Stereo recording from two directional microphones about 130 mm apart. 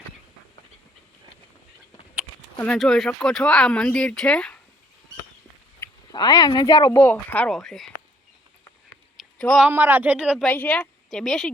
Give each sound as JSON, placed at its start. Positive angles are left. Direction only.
{"t": 2.7, "sound": "speech", "side_deg": 5}
{"t": 6.1, "sound": "speech", "side_deg": 35}
{"t": 7.0, "sound": "speech", "side_deg": 10}
{"t": 9.1, "sound": "a sound", "side_deg": 0}
{"t": 9.6, "sound": "speech", "side_deg": -15}
{"t": 10.4, "sound": "speech", "side_deg": 10}